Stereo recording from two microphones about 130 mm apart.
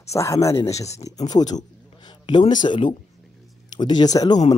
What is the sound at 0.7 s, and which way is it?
Speech, 55° left (ahead or behind).